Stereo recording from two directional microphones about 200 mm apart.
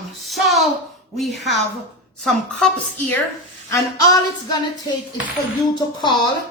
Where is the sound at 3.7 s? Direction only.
20° left (ahead or behind).